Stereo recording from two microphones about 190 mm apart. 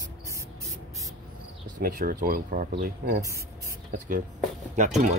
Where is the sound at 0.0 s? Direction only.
15° right (ahead or behind).